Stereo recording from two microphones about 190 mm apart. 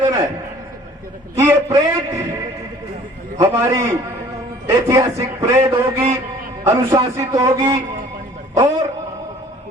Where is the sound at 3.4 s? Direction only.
15° right (ahead or behind).